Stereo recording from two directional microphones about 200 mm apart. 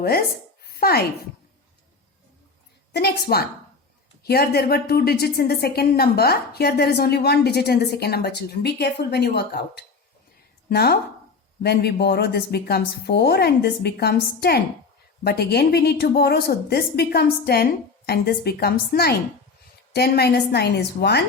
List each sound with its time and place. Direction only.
0.0 s a woman's voice: 50° left (ahead or behind)
0.7 s a sound: 50° left (ahead or behind)
2.9 s a woman's voice: 50° left (ahead or behind)